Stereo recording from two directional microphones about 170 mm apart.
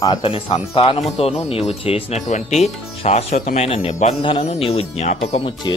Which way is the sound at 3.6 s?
35° left (ahead or behind).